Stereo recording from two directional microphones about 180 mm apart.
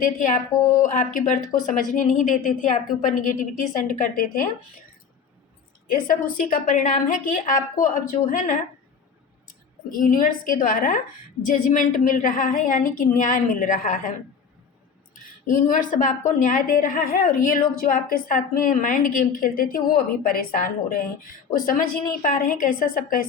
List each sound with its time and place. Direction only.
0.0 s a woman's voice: 45° left (ahead or behind)
5.9 s a woman's voice: 50° left (ahead or behind)
9.9 s a woman's voice: 50° left (ahead or behind)
15.1 s a woman's voice: 50° left (ahead or behind)